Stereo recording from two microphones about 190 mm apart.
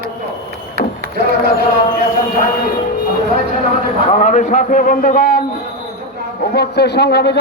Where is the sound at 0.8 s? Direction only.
55° right (ahead or behind).